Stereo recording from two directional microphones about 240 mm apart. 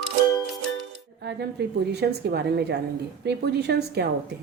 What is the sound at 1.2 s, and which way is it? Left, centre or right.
Speech, right.